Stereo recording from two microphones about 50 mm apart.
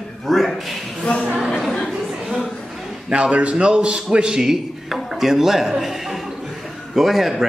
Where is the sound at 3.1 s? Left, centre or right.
Right; by 5.0 s centre.